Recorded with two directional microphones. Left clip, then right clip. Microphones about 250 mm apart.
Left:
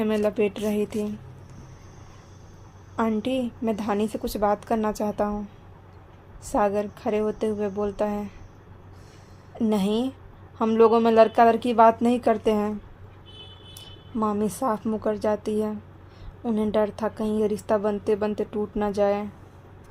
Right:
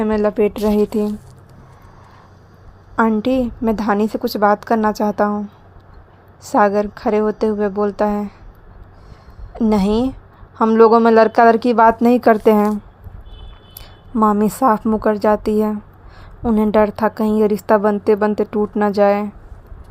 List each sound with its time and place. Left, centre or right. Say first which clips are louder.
0.0 s a woman's voice: right 7 dB; centre
2.9 s a woman's voice: right 9 dB; right
9.6 s a woman's voice: right 8 dB; right
14.2 s a woman's voice: right 11 dB; right